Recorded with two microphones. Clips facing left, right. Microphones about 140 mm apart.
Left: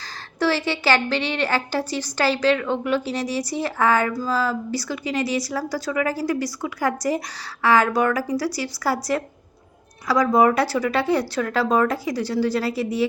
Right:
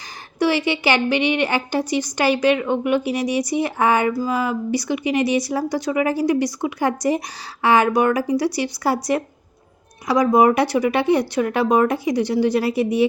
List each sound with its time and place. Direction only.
0.3 s a woman's voice: 15° right (ahead or behind)